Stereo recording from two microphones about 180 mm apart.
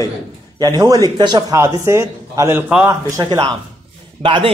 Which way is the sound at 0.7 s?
20° right (ahead or behind).